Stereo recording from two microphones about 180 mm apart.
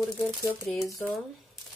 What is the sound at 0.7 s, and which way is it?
Speech, 15° left (ahead or behind).